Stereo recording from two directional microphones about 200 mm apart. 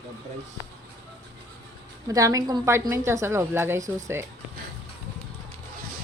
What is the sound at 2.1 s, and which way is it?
A woman's voice, 15° right (ahead or behind).